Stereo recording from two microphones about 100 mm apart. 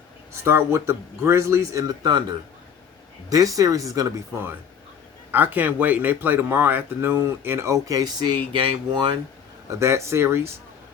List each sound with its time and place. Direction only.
0.4 s speech: 25° right (ahead or behind)
3.2 s speech: 35° right (ahead or behind)
5.3 s speech: 20° right (ahead or behind); by 8.4 s 45° right (ahead or behind)
8.5 s speech: 55° right (ahead or behind)
9.6 s speech: 30° right (ahead or behind)